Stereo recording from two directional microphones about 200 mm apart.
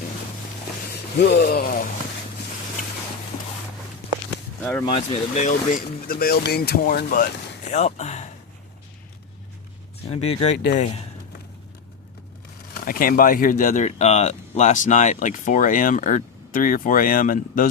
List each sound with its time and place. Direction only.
1.2 s speech: 55° left (ahead or behind)
4.9 s speech: 35° left (ahead or behind); by 7.7 s 50° left (ahead or behind)
7.7 s a sound: 35° left (ahead or behind)
10.1 s speech: 30° left (ahead or behind)
12.7 s speech: 45° left (ahead or behind)